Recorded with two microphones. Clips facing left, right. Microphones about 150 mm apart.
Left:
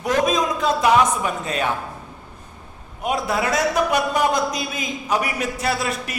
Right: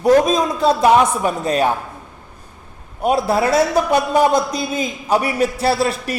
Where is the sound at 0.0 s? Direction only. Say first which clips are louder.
Right 6 dB; 35° right (ahead or behind).